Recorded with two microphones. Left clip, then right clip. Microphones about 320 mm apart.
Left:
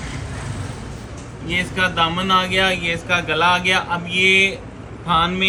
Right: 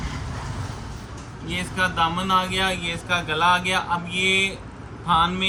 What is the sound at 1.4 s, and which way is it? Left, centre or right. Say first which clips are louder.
Speech: left 5 dB; centre.